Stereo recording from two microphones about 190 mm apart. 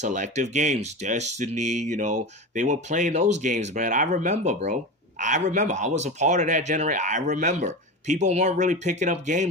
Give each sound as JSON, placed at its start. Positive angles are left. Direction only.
{"t": 0.0, "sound": "speech", "side_deg": -40}